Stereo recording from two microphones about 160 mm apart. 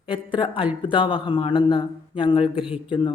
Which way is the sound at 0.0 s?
30° left (ahead or behind).